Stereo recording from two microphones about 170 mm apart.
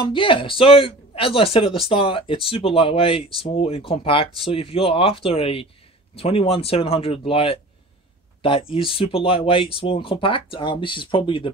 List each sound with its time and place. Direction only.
0.0 s speech: 30° left (ahead or behind)